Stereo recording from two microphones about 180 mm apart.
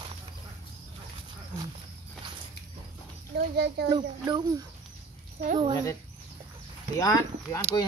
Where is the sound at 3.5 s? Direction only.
65° right (ahead or behind).